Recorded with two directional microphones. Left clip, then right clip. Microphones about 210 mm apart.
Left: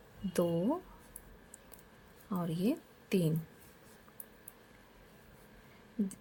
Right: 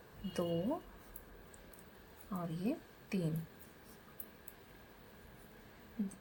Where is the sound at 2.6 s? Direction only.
50° left (ahead or behind).